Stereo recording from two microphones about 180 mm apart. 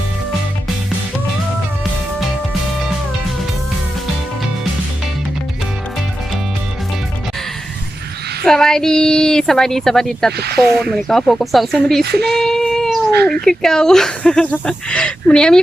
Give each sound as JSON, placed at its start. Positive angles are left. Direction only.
{"t": 8.4, "sound": "speech", "side_deg": 5}
{"t": 10.3, "sound": "speech", "side_deg": -65}
{"t": 10.8, "sound": "speech", "side_deg": 0}
{"t": 12.2, "sound": "child singing", "side_deg": 0}
{"t": 13.2, "sound": "speech", "side_deg": 5}